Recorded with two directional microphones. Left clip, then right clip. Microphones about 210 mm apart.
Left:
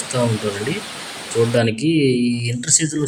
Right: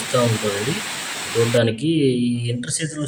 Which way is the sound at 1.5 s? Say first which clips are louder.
Left 1 dB; 5° left (ahead or behind).